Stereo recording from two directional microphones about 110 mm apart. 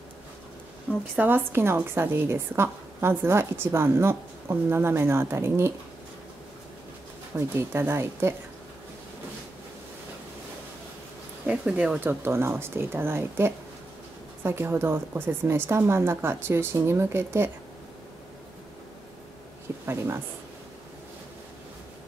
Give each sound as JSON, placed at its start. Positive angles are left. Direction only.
{"t": 1.1, "sound": "a woman's voice", "side_deg": -20}
{"t": 7.3, "sound": "a woman's voice", "side_deg": -25}
{"t": 11.4, "sound": "a woman's voice", "side_deg": -10}
{"t": 19.9, "sound": "a woman's voice", "side_deg": -25}